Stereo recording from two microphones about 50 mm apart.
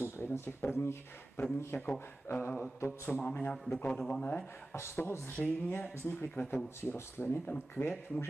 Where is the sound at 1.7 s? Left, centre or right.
Left.